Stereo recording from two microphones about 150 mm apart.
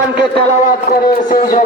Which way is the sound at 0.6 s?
65° left (ahead or behind).